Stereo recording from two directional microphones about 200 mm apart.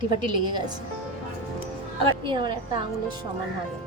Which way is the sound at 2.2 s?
25° right (ahead or behind).